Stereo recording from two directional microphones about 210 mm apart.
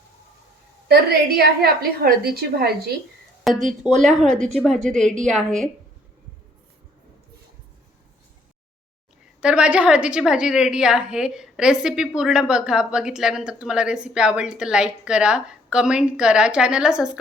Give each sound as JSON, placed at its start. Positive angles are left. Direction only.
{"t": 0.9, "sound": "a woman's voice", "side_deg": -45}
{"t": 3.4, "sound": "a woman's voice", "side_deg": 0}
{"t": 9.4, "sound": "a woman's voice", "side_deg": -5}